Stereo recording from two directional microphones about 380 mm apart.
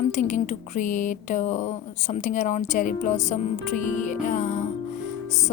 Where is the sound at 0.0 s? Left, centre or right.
Centre.